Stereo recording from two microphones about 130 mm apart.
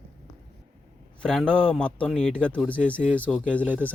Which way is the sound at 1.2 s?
5° left (ahead or behind).